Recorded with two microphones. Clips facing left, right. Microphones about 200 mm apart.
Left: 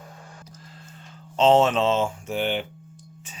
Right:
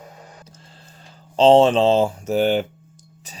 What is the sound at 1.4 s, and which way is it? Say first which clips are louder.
Speech: right 5 dB; 30° right (ahead or behind).